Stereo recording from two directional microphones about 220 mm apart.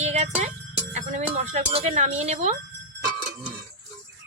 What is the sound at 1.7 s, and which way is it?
Speech, 30° right (ahead or behind).